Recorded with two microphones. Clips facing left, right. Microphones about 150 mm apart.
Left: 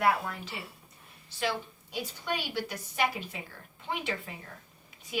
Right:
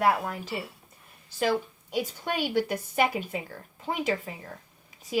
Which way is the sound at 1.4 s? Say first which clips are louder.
Right 6 dB; 45° right (ahead or behind).